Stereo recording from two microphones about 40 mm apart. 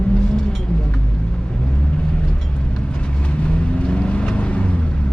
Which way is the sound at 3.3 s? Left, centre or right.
Left.